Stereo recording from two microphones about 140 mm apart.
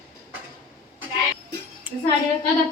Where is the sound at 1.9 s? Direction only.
10° right (ahead or behind).